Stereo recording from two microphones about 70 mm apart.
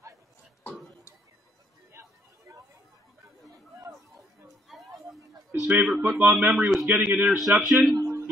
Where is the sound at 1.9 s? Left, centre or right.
Right.